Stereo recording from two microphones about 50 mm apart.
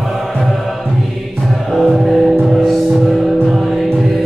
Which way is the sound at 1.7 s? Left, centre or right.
Centre.